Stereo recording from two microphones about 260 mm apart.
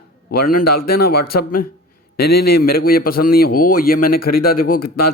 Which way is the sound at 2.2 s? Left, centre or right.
Left.